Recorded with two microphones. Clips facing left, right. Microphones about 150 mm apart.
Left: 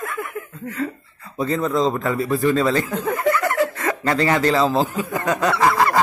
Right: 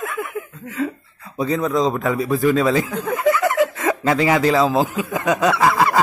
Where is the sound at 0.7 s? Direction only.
Centre (ahead or behind).